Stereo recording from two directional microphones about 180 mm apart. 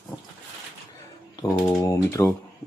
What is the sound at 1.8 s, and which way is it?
Typewriter, 15° left (ahead or behind).